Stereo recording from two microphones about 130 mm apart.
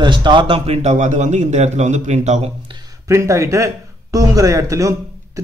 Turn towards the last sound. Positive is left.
turn(degrees=-25)  # may be behind; listen again after turning